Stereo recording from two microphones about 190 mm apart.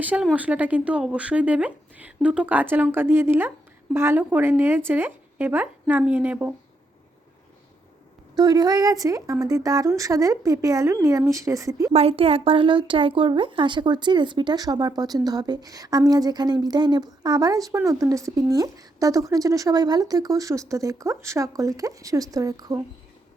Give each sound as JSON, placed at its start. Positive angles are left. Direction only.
{"t": 0.0, "sound": "speech", "side_deg": -5}
{"t": 8.4, "sound": "speech", "side_deg": -20}
{"t": 11.9, "sound": "speech", "side_deg": -30}